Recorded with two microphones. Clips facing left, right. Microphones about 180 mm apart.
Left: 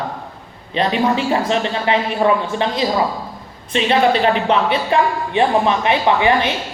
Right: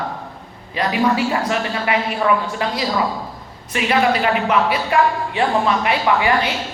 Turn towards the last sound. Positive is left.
turn(degrees=25)  # may be behind; listen again after turning